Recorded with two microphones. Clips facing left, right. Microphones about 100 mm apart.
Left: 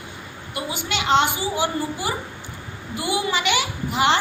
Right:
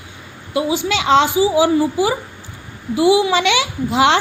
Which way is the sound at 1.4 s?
90° right.